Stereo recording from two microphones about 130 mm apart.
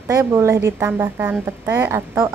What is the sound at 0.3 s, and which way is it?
A woman's voice, 20° right (ahead or behind).